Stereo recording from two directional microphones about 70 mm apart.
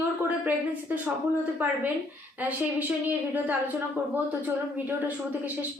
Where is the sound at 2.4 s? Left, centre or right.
Right.